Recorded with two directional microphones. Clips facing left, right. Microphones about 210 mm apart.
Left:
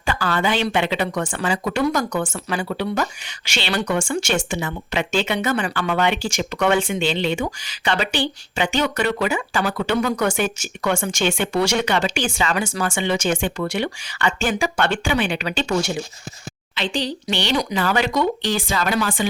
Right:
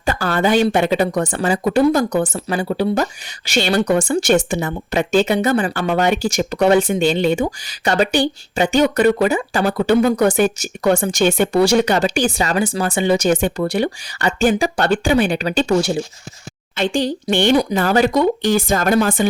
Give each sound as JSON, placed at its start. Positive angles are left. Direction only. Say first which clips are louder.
{"t": 0.0, "sound": "speech", "louder": "right 4 dB", "side_deg": -45}
{"t": 16.7, "sound": "speech", "louder": "right 6 dB", "side_deg": -50}